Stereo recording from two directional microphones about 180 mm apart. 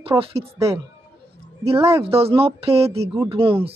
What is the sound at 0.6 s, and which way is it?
Speech, 15° right (ahead or behind).